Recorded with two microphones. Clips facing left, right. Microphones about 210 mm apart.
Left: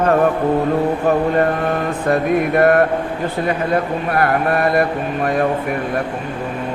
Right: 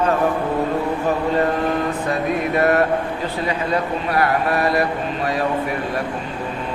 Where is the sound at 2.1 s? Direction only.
55° left (ahead or behind).